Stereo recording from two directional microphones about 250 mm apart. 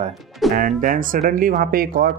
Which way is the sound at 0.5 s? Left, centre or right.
Right.